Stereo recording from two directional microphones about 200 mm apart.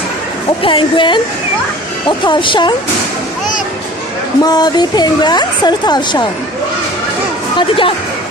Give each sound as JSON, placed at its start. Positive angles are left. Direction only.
{"t": 0.6, "sound": "speech", "side_deg": 25}
{"t": 4.4, "sound": "speech", "side_deg": 20}
{"t": 7.5, "sound": "speech", "side_deg": 25}